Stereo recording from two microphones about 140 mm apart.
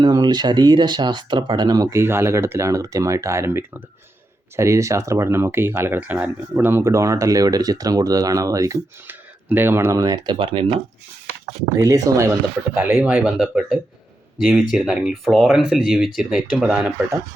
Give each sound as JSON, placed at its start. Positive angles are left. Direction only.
{"t": 0.0, "sound": "speech", "side_deg": -30}
{"t": 11.8, "sound": "speech", "side_deg": -25}
{"t": 13.4, "sound": "speech", "side_deg": 0}